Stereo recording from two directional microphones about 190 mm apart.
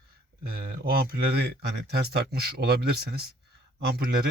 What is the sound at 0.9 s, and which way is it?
Speech, 60° right (ahead or behind).